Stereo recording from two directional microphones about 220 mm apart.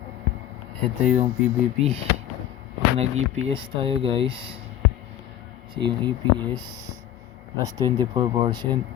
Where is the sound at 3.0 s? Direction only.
30° right (ahead or behind).